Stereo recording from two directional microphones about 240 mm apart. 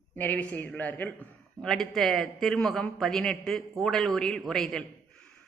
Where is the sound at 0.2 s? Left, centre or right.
Centre.